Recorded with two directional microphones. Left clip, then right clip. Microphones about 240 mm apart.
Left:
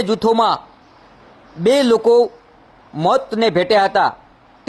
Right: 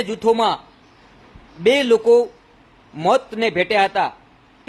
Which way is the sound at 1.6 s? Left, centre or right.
Left.